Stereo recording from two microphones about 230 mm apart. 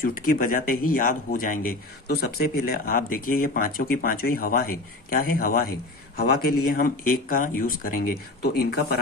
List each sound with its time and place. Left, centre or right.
0.0 s speech: left